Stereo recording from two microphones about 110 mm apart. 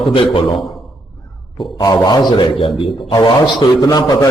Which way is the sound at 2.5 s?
50° left (ahead or behind).